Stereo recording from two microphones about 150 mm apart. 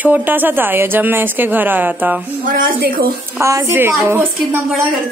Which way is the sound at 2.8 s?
85° right.